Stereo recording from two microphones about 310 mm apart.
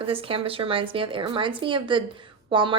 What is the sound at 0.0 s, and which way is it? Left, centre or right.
A woman's voice, centre.